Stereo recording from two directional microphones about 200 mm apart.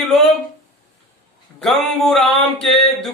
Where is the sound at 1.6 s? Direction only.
Centre (ahead or behind).